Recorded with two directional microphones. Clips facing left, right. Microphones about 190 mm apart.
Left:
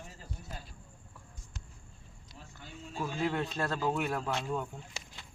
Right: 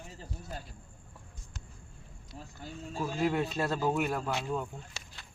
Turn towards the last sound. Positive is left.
turn(degrees=0)  # may be behind; listen again after turning